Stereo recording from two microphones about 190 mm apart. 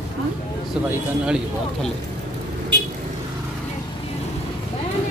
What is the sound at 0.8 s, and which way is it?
Speech, 5° right (ahead or behind).